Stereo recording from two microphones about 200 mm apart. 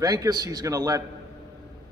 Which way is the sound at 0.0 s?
20° right (ahead or behind).